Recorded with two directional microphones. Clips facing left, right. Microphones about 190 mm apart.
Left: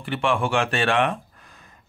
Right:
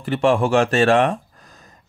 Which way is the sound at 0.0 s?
40° right (ahead or behind).